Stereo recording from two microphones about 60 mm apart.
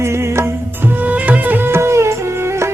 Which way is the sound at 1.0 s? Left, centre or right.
Right.